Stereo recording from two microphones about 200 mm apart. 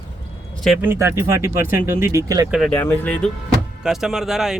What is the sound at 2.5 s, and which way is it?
A man's voice, centre (ahead or behind).